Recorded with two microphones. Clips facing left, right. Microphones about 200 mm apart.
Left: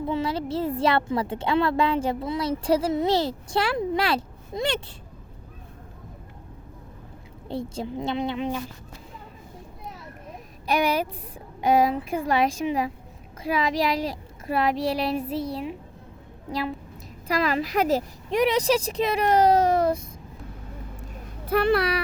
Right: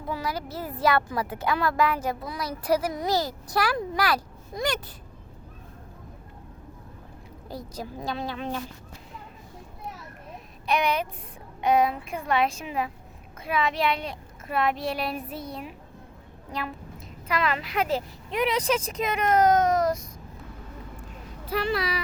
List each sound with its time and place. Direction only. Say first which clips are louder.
0.1 s speech: left 3 dB; 25° left (ahead or behind)
7.4 s speech: left 6 dB; 25° left (ahead or behind)
11.7 s a woman's voice: left 2 dB; 35° left (ahead or behind)
21.5 s speech: left 6 dB; 60° left (ahead or behind)